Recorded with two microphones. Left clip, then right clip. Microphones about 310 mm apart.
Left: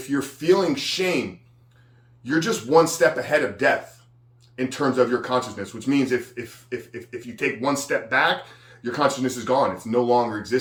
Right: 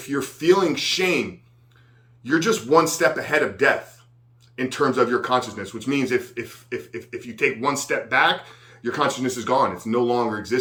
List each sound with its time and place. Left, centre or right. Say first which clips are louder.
0.1 s a man's voice: right 1 dB; centre
2.2 s a man's voice: right 3 dB; centre